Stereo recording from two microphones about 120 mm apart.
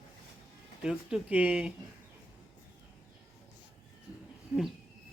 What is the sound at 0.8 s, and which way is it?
Speech, 5° right (ahead or behind).